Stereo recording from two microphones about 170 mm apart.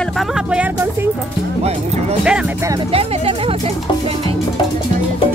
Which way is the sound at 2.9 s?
35° right (ahead or behind).